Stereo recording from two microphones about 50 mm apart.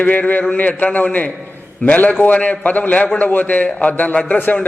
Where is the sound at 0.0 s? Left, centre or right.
Left.